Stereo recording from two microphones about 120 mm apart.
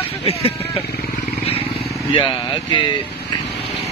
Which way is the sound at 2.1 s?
45° left (ahead or behind).